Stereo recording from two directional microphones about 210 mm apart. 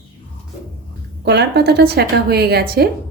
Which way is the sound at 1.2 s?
50° right (ahead or behind).